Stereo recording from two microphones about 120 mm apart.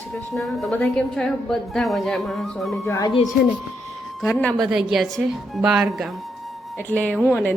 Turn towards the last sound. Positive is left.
turn(degrees=15)  # may be behind; listen again after turning